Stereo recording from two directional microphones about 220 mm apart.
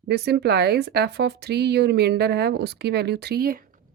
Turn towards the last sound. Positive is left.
turn(degrees=-40)  # may be behind; listen again after turning